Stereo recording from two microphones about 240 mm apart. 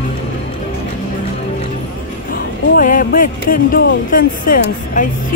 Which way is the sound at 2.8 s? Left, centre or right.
Left.